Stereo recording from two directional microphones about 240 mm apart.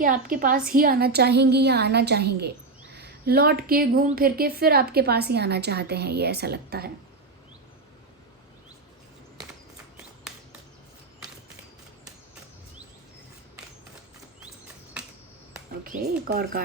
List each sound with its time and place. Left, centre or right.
0.0 s a woman's voice: right
15.0 s finger snapping: centre
15.8 s speech: right